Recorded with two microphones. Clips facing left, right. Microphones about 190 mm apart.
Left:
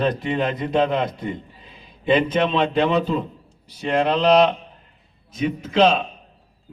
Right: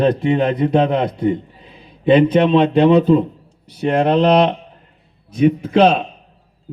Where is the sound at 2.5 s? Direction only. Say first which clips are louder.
Right 8 dB; 55° right (ahead or behind).